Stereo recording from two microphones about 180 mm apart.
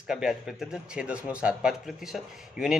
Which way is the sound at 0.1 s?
Centre (ahead or behind).